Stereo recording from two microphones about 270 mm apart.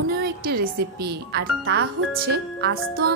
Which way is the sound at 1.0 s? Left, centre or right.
Right.